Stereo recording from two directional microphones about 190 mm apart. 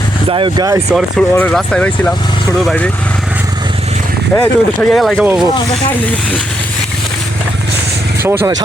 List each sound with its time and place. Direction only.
0.3 s speech: 25° right (ahead or behind)
1.3 s speech: 10° left (ahead or behind)
4.4 s speech: 5° left (ahead or behind)
8.2 s speech: 10° right (ahead or behind)